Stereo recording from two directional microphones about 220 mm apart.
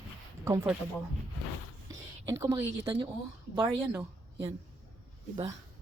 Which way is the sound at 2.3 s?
15° right (ahead or behind).